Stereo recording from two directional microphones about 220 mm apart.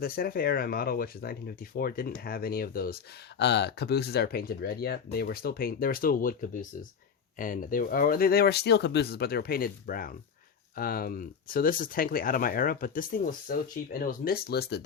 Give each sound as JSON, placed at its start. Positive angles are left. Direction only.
{"t": 0.0, "sound": "speech", "side_deg": 45}